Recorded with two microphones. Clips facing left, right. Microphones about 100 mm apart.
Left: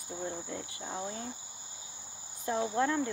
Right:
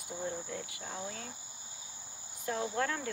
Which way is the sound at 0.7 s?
25° left (ahead or behind).